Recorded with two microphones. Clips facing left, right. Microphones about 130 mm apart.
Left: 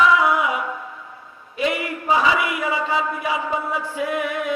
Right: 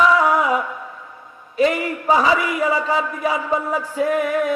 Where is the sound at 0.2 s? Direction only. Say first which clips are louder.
Right 3 dB; 40° right (ahead or behind).